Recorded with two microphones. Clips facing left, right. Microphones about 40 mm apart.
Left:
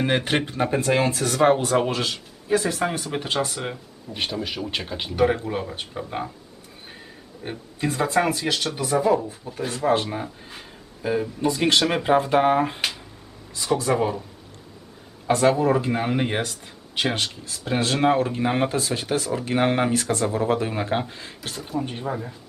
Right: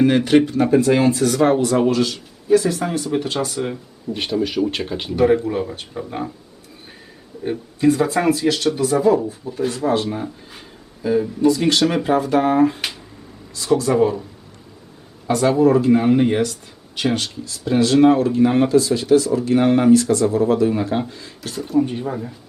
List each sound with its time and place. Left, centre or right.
0.0 s speech: left
0.9 s speech: centre
1.4 s speech: centre
4.2 s speech: centre
5.1 s speech: centre
7.8 s speech: centre
9.4 s speech: centre
9.7 s speech: left
10.1 s speech: centre
11.4 s speech: left; by 14.2 s centre
15.3 s speech: centre
16.4 s speech: left
18.7 s speech: left
21.5 s speech: centre